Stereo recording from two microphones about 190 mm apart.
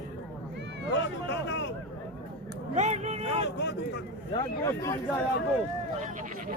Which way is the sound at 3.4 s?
65° left (ahead or behind).